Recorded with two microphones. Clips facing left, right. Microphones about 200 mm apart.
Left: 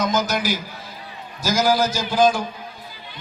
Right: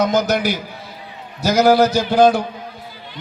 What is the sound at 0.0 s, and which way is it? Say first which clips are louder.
A man's voice: right 5 dB; 60° right (ahead or behind).